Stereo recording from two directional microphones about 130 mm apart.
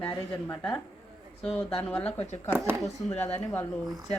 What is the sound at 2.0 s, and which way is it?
Speech, 55° left (ahead or behind).